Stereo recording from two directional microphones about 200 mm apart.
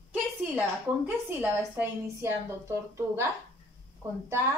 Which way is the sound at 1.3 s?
10° right (ahead or behind).